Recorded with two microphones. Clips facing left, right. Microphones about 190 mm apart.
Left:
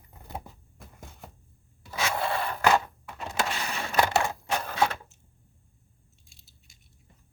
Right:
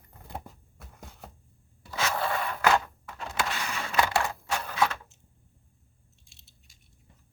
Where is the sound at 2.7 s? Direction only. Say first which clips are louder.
Left 1 dB; 20° left (ahead or behind).